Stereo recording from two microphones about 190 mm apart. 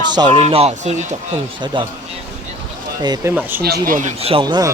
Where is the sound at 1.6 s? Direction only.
25° right (ahead or behind).